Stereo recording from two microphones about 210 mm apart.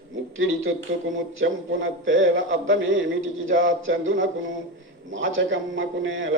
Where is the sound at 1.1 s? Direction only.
70° right (ahead or behind).